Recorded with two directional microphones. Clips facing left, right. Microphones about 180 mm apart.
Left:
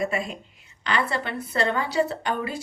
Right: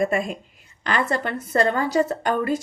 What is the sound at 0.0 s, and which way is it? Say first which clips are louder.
A woman's voice: right 5 dB; 50° right (ahead or behind).